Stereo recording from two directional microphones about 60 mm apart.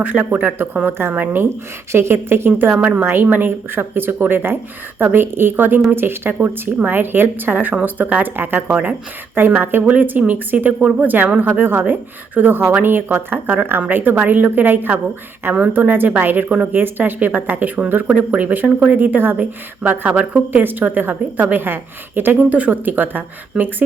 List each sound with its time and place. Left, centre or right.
0.0 s speech: right
1.9 s speech: right